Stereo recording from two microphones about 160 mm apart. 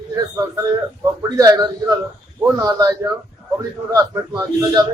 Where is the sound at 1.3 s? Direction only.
20° right (ahead or behind).